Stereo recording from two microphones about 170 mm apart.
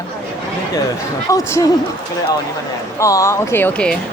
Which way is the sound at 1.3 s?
20° left (ahead or behind).